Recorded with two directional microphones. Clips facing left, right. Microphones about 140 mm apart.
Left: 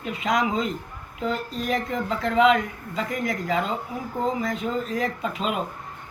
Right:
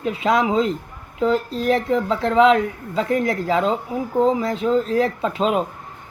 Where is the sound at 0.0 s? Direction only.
30° right (ahead or behind).